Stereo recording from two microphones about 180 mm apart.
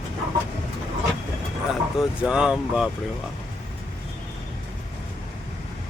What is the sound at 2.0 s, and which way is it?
Speech, 5° right (ahead or behind).